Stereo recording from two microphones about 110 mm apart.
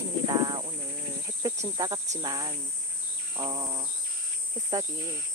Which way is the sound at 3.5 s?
30° right (ahead or behind).